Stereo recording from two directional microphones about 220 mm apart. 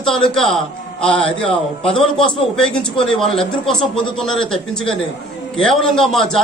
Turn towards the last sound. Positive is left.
turn(degrees=0)  # may be behind; listen again after turning